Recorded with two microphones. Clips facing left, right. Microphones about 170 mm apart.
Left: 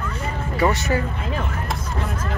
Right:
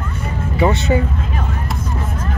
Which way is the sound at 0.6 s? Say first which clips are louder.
Right 4 dB; 20° right (ahead or behind).